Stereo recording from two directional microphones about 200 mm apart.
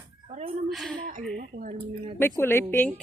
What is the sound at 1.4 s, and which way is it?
Speech, 40° right (ahead or behind).